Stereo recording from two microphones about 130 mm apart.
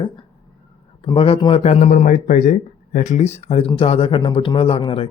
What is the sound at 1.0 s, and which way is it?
A man's voice, 40° left (ahead or behind).